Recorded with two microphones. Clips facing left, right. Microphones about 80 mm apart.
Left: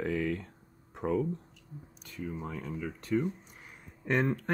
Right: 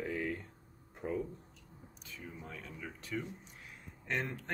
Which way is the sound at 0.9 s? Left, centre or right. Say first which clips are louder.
Left 7 dB; left.